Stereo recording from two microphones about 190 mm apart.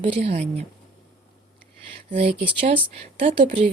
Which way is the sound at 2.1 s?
30° right (ahead or behind).